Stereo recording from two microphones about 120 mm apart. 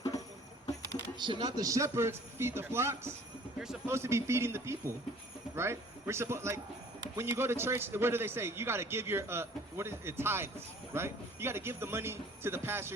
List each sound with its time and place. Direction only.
1.2 s a man's voice: 35° right (ahead or behind); by 12.9 s 20° right (ahead or behind)